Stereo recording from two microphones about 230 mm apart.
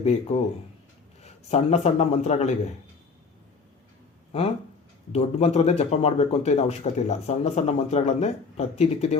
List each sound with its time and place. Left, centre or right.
0.0 s a man's voice: left
4.3 s speech: left